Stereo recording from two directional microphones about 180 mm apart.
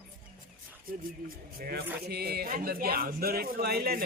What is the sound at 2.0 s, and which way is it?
Speech, 60° right (ahead or behind).